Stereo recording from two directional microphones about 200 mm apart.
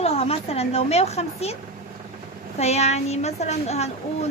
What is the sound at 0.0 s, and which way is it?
A woman's voice, 30° left (ahead or behind).